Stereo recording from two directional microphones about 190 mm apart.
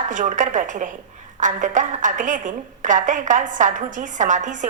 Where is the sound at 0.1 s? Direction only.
40° right (ahead or behind).